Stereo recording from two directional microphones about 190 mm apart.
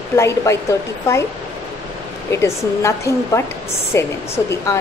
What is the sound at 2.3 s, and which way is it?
Speech, 15° left (ahead or behind).